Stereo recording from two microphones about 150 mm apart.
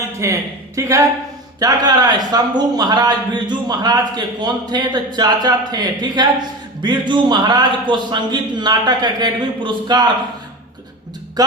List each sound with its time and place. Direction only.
0.2 s speech: 20° right (ahead or behind)